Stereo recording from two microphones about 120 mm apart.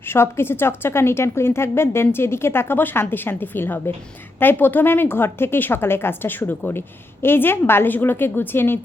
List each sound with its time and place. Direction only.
0.1 s a woman's voice: 20° left (ahead or behind)